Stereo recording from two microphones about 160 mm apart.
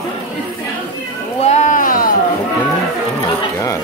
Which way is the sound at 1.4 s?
45° left (ahead or behind).